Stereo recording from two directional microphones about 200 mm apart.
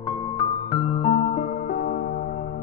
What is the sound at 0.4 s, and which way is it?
Music, 25° left (ahead or behind).